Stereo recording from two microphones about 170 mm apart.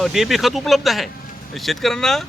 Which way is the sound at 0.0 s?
Centre (ahead or behind).